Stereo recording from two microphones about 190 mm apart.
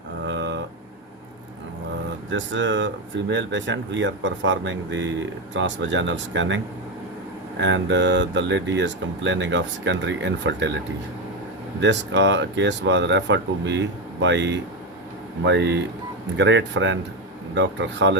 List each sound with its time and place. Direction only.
0.3 s a sound: 70° right (ahead or behind)
2.3 s speech: 75° right (ahead or behind)
7.6 s speech: 70° right (ahead or behind)
11.8 s speech: 70° right (ahead or behind)